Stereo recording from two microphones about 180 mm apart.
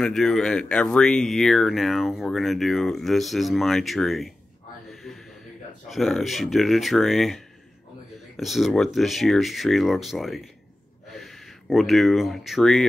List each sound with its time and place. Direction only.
0.0 s speech: centre (ahead or behind)
5.9 s speech: centre (ahead or behind)